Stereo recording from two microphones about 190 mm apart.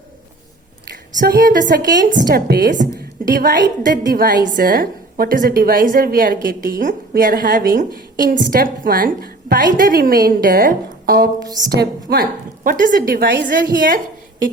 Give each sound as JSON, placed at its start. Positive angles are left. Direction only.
{"t": 1.2, "sound": "a woman's voice", "side_deg": -50}
{"t": 11.3, "sound": "a woman's voice", "side_deg": -20}
{"t": 11.6, "sound": "a woman's voice", "side_deg": -55}